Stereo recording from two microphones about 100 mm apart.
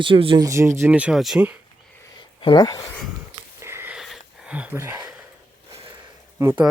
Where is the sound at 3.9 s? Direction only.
5° right (ahead or behind).